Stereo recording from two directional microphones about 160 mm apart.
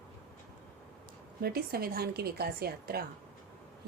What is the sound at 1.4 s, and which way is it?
Speech, 75° right (ahead or behind).